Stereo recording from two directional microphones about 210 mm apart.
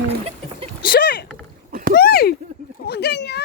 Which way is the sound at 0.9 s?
45° left (ahead or behind).